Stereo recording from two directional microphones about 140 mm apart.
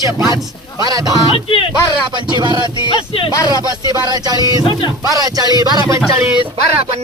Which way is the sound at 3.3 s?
25° left (ahead or behind).